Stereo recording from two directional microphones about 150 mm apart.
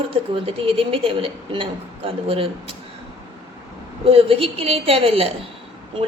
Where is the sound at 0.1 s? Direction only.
35° right (ahead or behind).